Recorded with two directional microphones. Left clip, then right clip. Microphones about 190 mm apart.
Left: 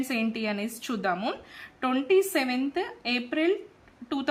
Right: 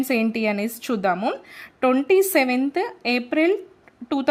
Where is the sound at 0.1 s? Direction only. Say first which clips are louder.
Right 8 dB; 40° right (ahead or behind).